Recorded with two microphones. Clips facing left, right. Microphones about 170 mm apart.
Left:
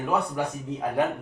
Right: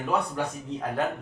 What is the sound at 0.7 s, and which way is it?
Speech, 5° left (ahead or behind).